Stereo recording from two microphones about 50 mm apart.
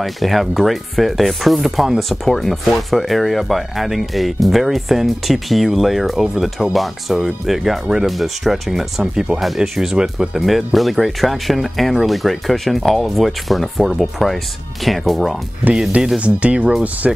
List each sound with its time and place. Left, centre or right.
0.0 s speech: centre
16.2 s speech: right
17.0 s speech: centre